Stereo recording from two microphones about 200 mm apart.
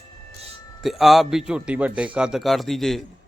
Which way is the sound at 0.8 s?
Centre (ahead or behind).